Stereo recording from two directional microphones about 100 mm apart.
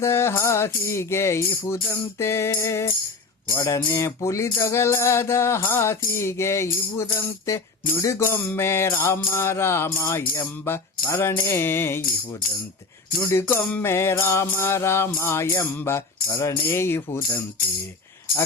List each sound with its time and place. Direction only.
0.0 s music: 25° left (ahead or behind)
3.5 s speech: 35° left (ahead or behind)
3.8 s music: 30° left (ahead or behind)
13.3 s music: 25° left (ahead or behind)